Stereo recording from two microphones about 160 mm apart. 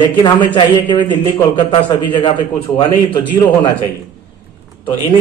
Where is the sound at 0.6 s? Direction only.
30° left (ahead or behind).